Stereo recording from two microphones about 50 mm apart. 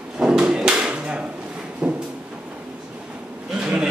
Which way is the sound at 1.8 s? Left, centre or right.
Centre.